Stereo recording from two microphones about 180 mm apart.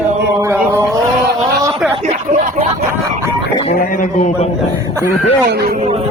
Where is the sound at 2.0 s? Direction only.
45° right (ahead or behind).